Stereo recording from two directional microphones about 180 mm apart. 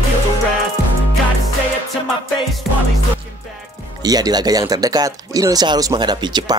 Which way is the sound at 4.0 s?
20° right (ahead or behind).